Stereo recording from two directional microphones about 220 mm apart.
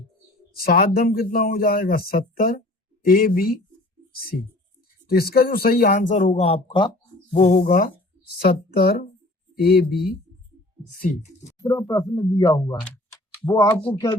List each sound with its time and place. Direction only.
0.6 s speech: 40° left (ahead or behind); by 6.9 s 20° left (ahead or behind)
7.3 s speech: 35° left (ahead or behind)
11.6 s speech: 15° left (ahead or behind)